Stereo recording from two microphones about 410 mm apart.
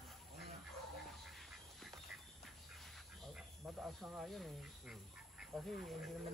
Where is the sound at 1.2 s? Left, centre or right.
Centre.